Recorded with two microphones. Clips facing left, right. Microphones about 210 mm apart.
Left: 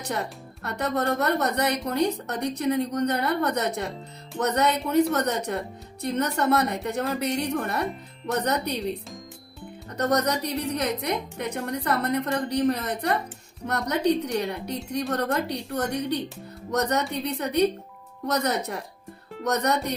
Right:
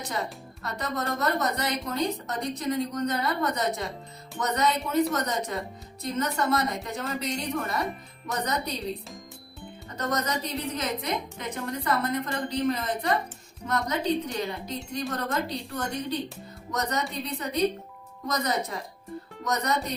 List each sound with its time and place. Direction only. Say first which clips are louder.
0.0 s a woman's voice: left 2 dB; 65° left (ahead or behind)
10.0 s a woman's voice: left 5 dB; 65° left (ahead or behind)